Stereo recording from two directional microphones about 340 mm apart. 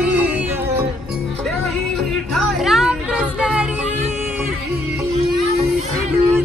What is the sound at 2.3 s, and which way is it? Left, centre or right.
Music, centre.